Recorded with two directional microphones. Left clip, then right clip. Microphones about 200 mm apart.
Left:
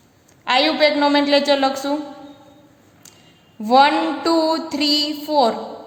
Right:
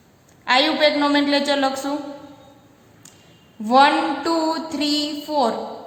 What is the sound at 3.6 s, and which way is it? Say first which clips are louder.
Mantra: left 1 dB; 25° left (ahead or behind).